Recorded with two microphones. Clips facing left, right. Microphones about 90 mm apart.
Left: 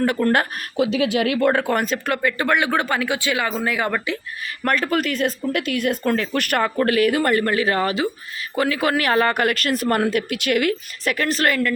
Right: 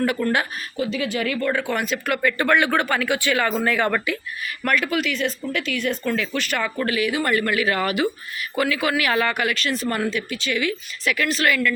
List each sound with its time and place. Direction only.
0.0 s speech: 35° left (ahead or behind)
0.8 s speech: 85° left; by 2.3 s 30° left (ahead or behind)
2.4 s speech: 20° left (ahead or behind)
4.6 s speech: 35° left (ahead or behind)
6.3 s speech: 55° left (ahead or behind)